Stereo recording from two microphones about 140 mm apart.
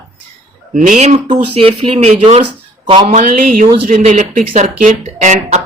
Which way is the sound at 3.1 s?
70° right (ahead or behind).